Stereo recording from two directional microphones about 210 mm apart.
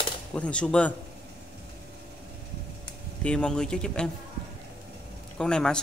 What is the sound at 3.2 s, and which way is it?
Speech, 5° left (ahead or behind).